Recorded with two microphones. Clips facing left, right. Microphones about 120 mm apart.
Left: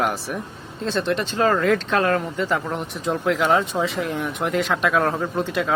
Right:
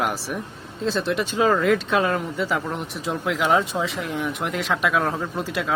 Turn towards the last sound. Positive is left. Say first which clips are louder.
# left 3 dB
turn(degrees=0)  # may be behind; listen again after turning